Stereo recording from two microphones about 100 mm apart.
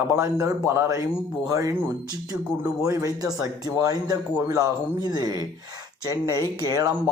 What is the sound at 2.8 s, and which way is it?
A man's voice, 35° right (ahead or behind).